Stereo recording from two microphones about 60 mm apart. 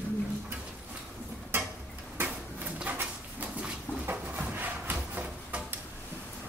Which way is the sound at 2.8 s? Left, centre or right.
Right.